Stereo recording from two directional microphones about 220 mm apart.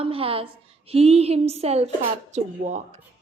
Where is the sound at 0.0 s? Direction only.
25° right (ahead or behind).